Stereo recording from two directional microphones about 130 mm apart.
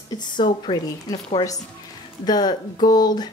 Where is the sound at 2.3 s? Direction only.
30° left (ahead or behind).